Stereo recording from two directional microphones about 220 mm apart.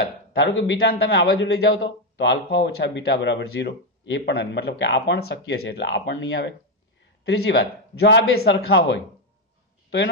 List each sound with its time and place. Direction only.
0.0 s a man's voice: 55° left (ahead or behind)